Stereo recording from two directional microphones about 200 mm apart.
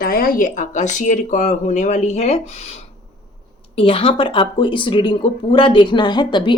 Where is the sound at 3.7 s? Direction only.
25° left (ahead or behind).